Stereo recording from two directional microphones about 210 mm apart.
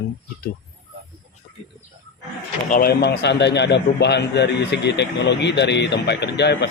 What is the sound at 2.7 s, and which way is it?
A man's voice, 45° left (ahead or behind).